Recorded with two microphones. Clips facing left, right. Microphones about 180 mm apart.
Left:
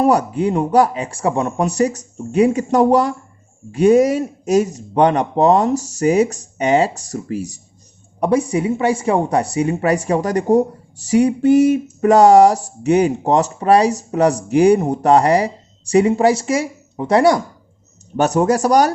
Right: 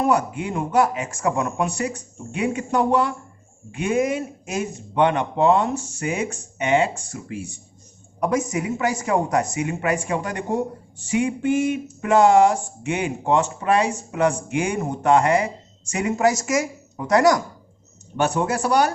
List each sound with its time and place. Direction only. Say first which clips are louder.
0.0 s speech: left 6 dB; 35° left (ahead or behind)
18.2 s speech: left 7 dB; 40° left (ahead or behind)